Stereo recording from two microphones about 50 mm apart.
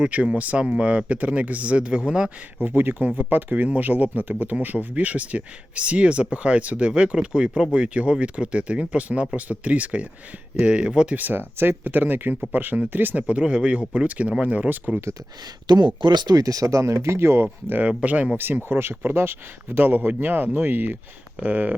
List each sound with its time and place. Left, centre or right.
0.0 s speech: right
2.6 s speech: right; by 11.2 s centre
11.2 s speech: right
16.6 s speech: right
17.4 s speech: right
17.8 s speech: right
18.3 s speech: right
21.4 s speech: right